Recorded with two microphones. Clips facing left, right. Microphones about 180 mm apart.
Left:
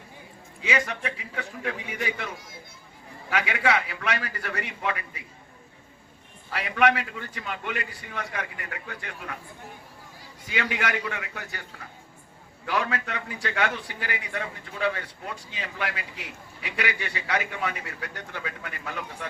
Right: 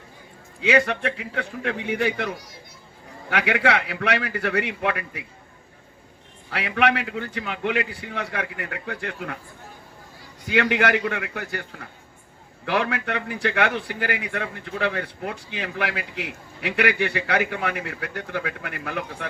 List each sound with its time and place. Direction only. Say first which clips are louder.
0.6 s a man's voice: right 8 dB; 60° right (ahead or behind)
6.5 s a man's voice: right 1 dB; 60° right (ahead or behind)
10.5 s a man's voice: right 8 dB; 65° right (ahead or behind)